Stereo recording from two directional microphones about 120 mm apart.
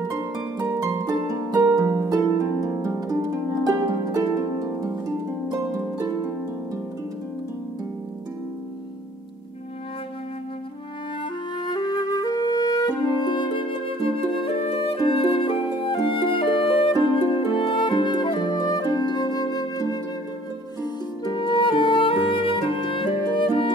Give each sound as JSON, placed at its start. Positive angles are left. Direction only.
{"t": 0.1, "sound": "harp", "side_deg": -30}
{"t": 11.6, "sound": "music", "side_deg": 35}
{"t": 21.4, "sound": "music", "side_deg": 40}